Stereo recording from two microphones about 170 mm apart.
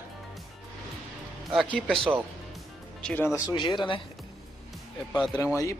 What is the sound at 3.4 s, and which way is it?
Speech, 30° left (ahead or behind).